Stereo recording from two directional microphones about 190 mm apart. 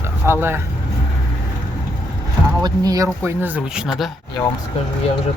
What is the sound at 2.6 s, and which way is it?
Speech, 20° right (ahead or behind).